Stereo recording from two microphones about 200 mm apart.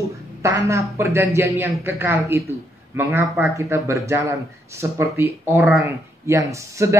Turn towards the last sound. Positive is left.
turn(degrees=-15)  # may be behind; listen again after turning